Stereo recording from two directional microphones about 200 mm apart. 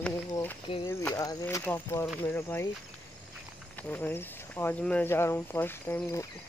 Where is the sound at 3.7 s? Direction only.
10° left (ahead or behind).